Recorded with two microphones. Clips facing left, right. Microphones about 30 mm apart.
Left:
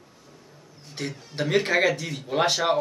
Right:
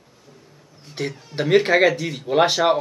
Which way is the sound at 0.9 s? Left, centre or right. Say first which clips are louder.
Right 6 dB; centre.